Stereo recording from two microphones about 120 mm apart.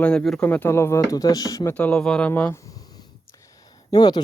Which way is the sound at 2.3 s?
20° left (ahead or behind).